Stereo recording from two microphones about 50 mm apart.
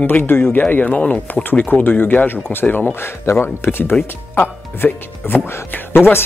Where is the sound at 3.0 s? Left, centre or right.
Left.